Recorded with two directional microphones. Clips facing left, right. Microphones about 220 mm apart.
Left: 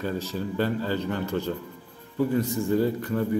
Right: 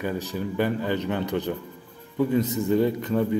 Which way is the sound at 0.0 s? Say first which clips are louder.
Right 1 dB; 15° right (ahead or behind).